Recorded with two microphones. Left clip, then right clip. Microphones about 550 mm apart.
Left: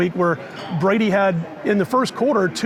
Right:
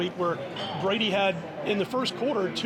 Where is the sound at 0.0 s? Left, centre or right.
Left.